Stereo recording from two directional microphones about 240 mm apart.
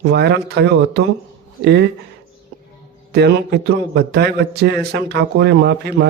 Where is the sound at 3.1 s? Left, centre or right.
Right.